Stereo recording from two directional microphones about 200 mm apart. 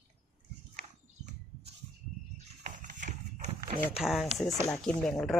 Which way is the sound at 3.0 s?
40° right (ahead or behind).